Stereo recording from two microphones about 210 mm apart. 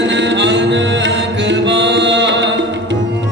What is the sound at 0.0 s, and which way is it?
Music, 60° right (ahead or behind).